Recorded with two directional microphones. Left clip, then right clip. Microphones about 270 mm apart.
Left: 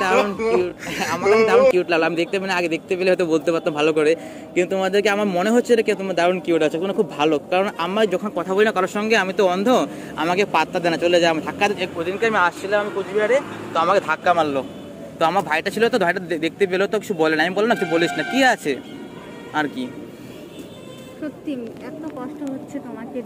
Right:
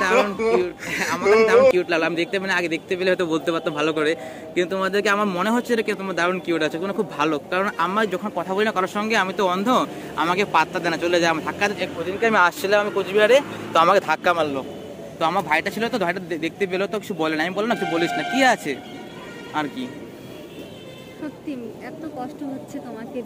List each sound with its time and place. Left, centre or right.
0.1 s speech: centre
1.8 s a man's voice: centre
12.3 s speech: right
15.1 s a man's voice: centre